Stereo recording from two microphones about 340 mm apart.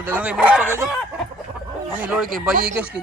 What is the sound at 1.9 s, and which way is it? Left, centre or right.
Speech, centre.